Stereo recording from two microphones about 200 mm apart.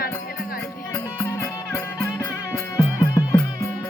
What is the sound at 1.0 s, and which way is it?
Music, 15° left (ahead or behind).